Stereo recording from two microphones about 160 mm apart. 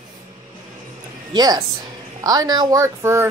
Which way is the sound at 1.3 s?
25° right (ahead or behind).